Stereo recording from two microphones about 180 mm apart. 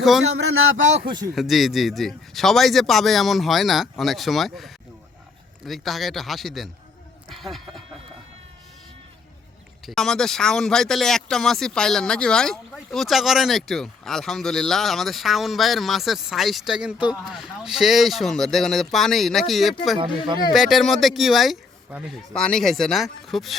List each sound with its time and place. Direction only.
0.9 s speech: 25° right (ahead or behind)
1.4 s speech: centre (ahead or behind)
9.8 s speech: centre (ahead or behind)
20.0 s speech: 25° right (ahead or behind)
20.5 s speech: centre (ahead or behind)